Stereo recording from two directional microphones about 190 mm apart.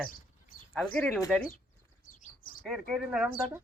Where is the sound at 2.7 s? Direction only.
Centre (ahead or behind).